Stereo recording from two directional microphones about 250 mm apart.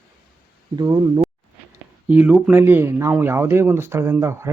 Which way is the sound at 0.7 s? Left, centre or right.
Centre.